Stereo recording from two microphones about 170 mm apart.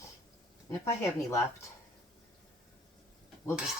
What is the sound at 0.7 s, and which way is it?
Speech, 15° left (ahead or behind).